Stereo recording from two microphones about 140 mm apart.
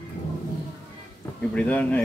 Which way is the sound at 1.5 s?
10° left (ahead or behind).